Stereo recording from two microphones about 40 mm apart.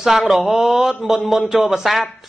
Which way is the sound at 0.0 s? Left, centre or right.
Centre.